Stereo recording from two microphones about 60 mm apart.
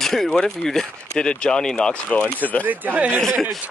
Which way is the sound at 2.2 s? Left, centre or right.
Left.